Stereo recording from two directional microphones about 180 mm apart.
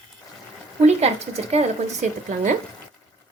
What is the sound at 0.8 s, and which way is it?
Speech, 35° right (ahead or behind).